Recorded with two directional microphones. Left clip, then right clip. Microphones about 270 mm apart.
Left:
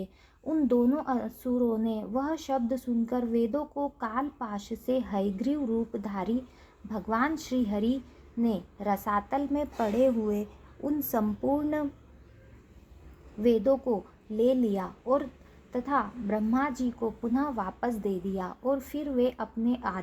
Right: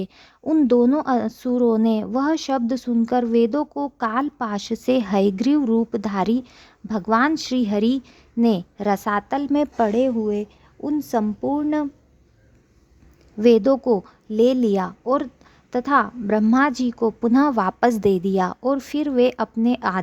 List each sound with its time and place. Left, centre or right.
0.4 s speech: right
11.1 s speech: right
13.4 s speech: right